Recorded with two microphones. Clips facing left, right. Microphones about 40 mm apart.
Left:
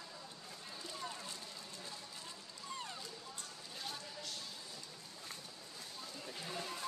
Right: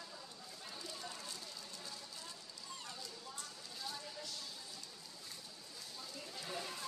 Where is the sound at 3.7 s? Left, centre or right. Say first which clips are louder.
Even; left.